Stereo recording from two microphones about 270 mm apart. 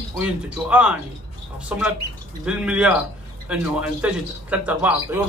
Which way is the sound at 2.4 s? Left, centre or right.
Centre.